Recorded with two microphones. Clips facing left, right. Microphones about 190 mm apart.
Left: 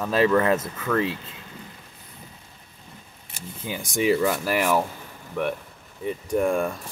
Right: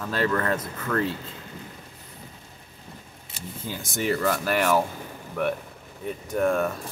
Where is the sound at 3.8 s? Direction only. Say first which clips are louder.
Left 5 dB; centre (ahead or behind).